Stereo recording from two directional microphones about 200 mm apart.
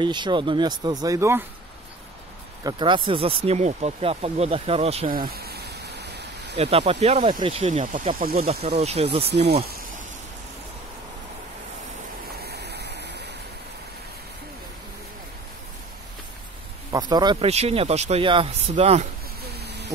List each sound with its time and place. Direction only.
0.0 s speech: 25° right (ahead or behind)
2.6 s speech: 25° right (ahead or behind)
5.1 s a sound: 50° right (ahead or behind)
6.6 s speech: 30° right (ahead or behind); by 8.5 s 45° right (ahead or behind)
8.6 s speech: 30° right (ahead or behind)
9.2 s speech: 55° right (ahead or behind)
12.4 s waterfall: 55° right (ahead or behind)
16.9 s speech: 20° right (ahead or behind)
19.4 s a sound: 55° right (ahead or behind)